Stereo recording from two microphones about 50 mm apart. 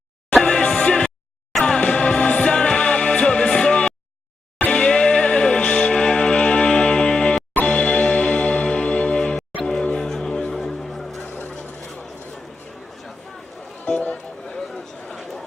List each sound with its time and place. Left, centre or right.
0.4 s music: centre
11.2 s fowl: left
13.8 s music: left
14.5 s a sound: centre